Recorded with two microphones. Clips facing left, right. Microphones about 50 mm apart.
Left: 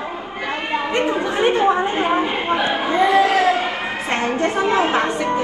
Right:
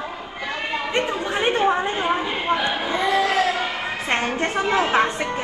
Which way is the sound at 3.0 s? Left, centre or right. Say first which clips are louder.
Left 5 dB; left.